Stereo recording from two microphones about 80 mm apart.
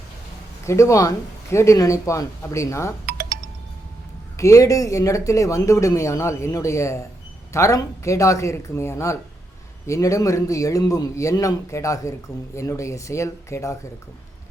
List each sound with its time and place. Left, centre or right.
0.6 s speech: left
4.4 s a man's voice: left